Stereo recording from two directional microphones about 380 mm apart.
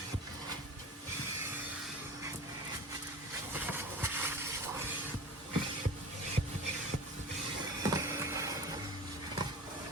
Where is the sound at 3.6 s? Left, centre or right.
Centre.